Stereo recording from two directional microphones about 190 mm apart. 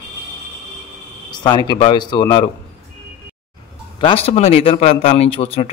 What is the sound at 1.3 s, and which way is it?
Speech, 20° left (ahead or behind).